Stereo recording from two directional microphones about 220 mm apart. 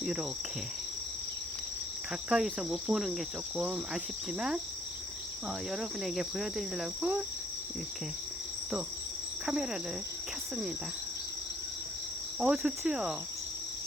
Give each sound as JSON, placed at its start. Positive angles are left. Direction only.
{"t": 0.0, "sound": "insect", "side_deg": -5}
{"t": 2.3, "sound": "insect", "side_deg": 0}
{"t": 5.7, "sound": "insect", "side_deg": 0}
{"t": 9.5, "sound": "insect", "side_deg": -5}
{"t": 12.4, "sound": "insect", "side_deg": -5}